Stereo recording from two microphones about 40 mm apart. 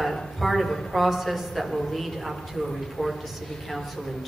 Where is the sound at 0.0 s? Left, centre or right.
Centre.